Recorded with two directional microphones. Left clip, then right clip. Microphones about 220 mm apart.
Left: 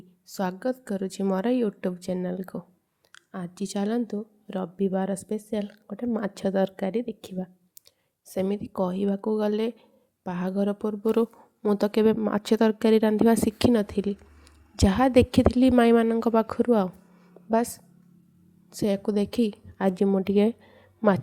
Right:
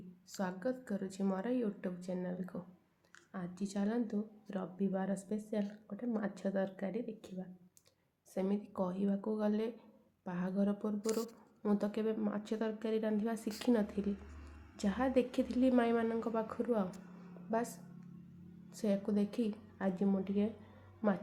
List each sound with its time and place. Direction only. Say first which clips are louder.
0.3 s a woman's voice: left 10 dB; 40° left (ahead or behind)
21.0 s a woman's voice: left 13 dB; 35° left (ahead or behind)